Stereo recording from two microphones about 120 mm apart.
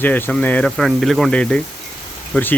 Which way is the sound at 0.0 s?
15° left (ahead or behind).